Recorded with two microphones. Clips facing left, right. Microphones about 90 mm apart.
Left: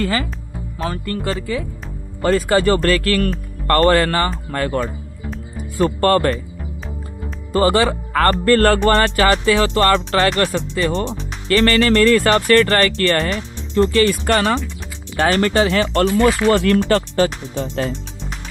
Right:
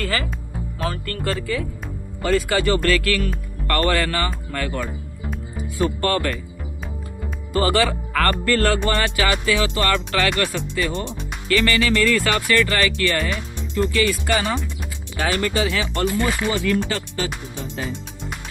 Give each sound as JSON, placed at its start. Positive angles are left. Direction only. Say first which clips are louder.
{"t": 0.0, "sound": "speech", "louder": "left 4 dB", "side_deg": 20}
{"t": 2.2, "sound": "speech", "louder": "left 4 dB", "side_deg": 40}
{"t": 7.5, "sound": "speech", "louder": "left 4 dB", "side_deg": 35}
{"t": 15.1, "sound": "speech", "louder": "left 6 dB", "side_deg": 45}